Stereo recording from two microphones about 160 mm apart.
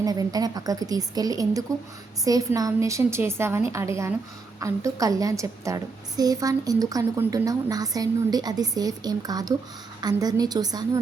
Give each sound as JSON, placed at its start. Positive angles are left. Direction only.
{"t": 0.0, "sound": "a woman's voice", "side_deg": -20}